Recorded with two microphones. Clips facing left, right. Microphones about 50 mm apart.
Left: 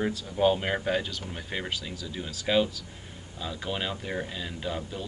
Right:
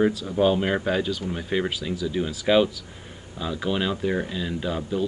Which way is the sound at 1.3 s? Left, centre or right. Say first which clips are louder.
Right 8 dB; centre.